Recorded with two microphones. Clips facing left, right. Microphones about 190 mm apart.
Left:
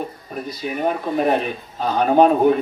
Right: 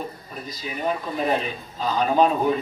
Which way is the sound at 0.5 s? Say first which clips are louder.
Left 4 dB; 60° left (ahead or behind).